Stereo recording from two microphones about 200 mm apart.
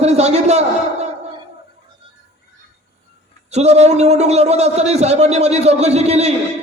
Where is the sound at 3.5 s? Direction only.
35° right (ahead or behind).